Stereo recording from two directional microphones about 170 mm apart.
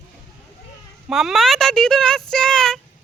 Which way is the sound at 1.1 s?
Centre (ahead or behind).